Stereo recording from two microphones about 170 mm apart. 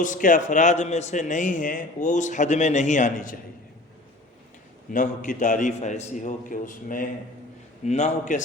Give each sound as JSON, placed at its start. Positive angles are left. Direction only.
{"t": 0.0, "sound": "a man's voice", "side_deg": 50}
{"t": 4.9, "sound": "a man's voice", "side_deg": 50}